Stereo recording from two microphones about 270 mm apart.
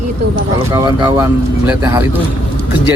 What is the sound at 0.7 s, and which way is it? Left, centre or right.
Speech, centre.